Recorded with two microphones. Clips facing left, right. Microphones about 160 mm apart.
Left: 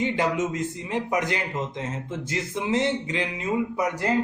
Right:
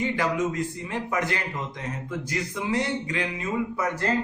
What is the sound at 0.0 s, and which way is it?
A man's voice, 20° left (ahead or behind).